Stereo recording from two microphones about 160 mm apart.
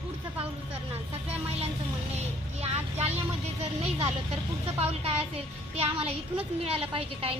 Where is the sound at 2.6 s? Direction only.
40° right (ahead or behind).